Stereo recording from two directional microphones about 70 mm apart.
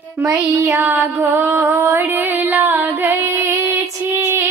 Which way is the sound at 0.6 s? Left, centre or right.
Right.